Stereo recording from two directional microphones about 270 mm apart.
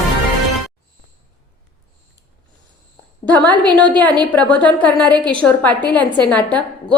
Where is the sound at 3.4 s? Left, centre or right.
Centre.